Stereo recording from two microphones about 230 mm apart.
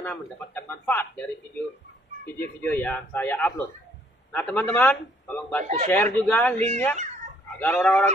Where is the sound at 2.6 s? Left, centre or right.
Centre.